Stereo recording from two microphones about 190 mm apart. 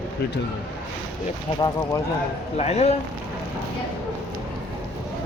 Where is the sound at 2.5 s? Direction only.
35° left (ahead or behind).